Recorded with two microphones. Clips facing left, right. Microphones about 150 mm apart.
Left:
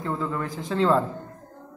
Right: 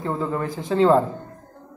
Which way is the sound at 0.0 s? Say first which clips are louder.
Right 3 dB; 20° right (ahead or behind).